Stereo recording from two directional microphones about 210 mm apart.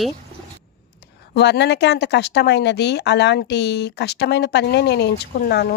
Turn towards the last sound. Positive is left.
turn(degrees=50)  # may be behind; listen again after turning